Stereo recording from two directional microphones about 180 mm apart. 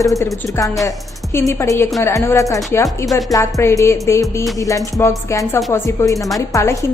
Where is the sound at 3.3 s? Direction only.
15° left (ahead or behind).